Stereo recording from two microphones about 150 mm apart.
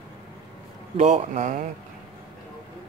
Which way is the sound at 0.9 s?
50° right (ahead or behind).